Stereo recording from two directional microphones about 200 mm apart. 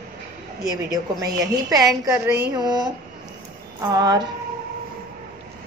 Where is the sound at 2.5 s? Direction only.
20° right (ahead or behind).